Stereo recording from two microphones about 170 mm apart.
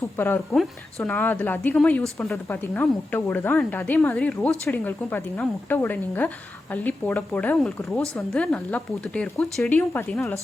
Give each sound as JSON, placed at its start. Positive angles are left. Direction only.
{"t": 0.2, "sound": "a woman's voice", "side_deg": 10}